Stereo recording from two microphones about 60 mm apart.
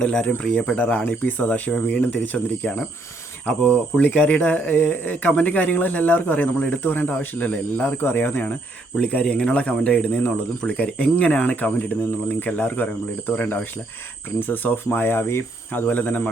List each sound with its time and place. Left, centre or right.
0.0 s speech: centre
3.6 s speech: centre
8.0 s speech: left
9.0 s speech: left